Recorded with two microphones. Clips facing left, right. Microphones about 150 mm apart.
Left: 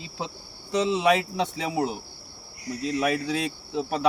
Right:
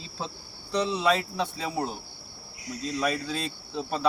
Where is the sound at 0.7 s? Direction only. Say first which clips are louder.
Left 3 dB; 20° left (ahead or behind).